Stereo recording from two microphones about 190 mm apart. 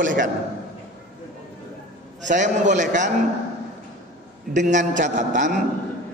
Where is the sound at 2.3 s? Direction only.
40° right (ahead or behind).